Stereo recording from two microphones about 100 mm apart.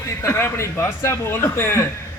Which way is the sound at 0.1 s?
25° left (ahead or behind).